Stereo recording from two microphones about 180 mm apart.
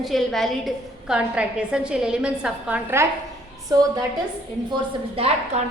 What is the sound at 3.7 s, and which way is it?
Speech, 20° right (ahead or behind).